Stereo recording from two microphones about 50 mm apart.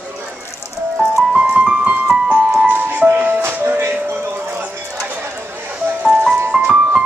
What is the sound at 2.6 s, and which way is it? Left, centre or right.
Music, right.